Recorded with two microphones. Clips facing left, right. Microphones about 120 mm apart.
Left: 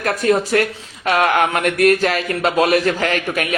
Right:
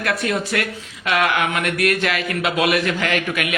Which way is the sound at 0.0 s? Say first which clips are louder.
Left 5 dB; 40° left (ahead or behind).